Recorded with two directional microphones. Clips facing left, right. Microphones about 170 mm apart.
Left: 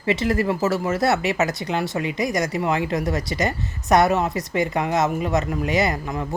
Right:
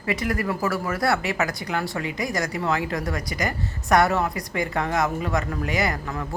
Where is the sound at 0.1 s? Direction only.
25° left (ahead or behind).